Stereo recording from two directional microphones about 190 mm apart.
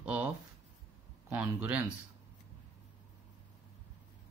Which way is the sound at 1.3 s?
10° right (ahead or behind).